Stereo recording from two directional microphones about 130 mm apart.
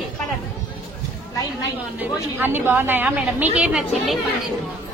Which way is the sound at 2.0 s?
15° right (ahead or behind).